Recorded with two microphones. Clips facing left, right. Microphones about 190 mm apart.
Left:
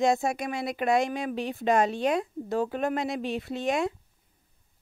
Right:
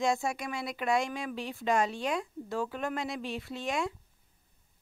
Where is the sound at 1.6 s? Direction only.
60° left (ahead or behind).